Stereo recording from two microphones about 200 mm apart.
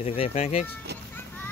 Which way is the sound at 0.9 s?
55° right (ahead or behind).